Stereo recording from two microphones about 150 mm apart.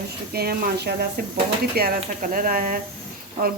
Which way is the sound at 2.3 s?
65° right (ahead or behind).